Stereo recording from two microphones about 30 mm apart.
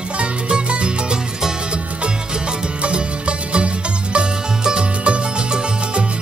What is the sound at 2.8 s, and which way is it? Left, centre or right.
Music, right.